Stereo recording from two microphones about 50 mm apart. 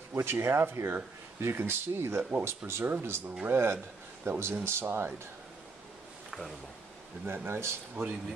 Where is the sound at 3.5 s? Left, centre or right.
Right.